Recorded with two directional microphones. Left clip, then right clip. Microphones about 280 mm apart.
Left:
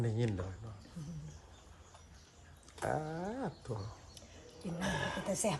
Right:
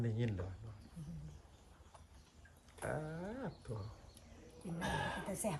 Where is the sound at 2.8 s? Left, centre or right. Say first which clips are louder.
Left 6 dB; centre.